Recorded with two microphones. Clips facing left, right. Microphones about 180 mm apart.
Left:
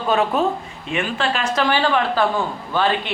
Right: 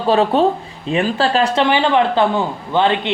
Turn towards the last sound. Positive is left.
turn(degrees=-20)  # may be behind; listen again after turning